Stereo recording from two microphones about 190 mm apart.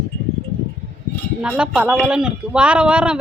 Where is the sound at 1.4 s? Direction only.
5° right (ahead or behind).